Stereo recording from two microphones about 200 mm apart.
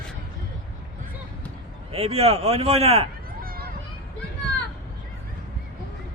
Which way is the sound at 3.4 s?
50° right (ahead or behind).